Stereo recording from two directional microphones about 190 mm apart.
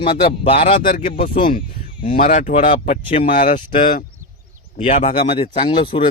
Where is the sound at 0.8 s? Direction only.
45° left (ahead or behind).